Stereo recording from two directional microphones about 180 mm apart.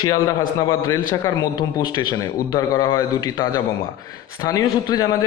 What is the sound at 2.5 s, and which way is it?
A man's voice, 20° left (ahead or behind).